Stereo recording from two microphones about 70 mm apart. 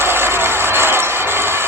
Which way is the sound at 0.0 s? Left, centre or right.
Right.